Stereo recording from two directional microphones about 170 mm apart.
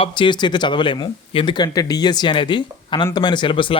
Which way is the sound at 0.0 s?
30° left (ahead or behind).